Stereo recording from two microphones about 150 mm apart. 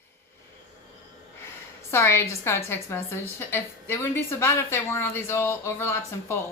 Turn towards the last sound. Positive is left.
turn(degrees=15)  # may be behind; listen again after turning